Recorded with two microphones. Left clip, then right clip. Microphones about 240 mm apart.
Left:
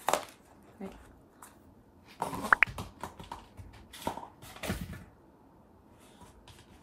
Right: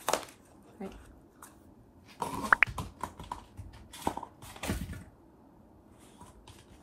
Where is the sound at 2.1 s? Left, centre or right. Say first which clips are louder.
Even; centre.